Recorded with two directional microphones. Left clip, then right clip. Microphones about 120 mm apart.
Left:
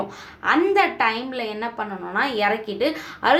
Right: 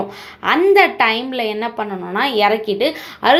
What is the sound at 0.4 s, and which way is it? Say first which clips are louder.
A woman's voice: right 6 dB; 30° right (ahead or behind).